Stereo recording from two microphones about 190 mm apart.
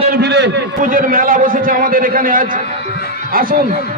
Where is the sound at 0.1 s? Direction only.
60° right (ahead or behind).